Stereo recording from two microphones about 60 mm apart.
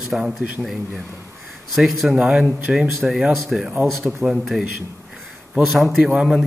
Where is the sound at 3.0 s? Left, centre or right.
Centre.